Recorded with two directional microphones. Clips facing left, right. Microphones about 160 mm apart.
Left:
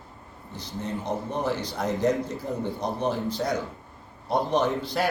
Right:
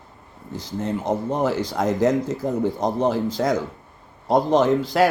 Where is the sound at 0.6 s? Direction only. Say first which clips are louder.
Right 6 dB; 90° right.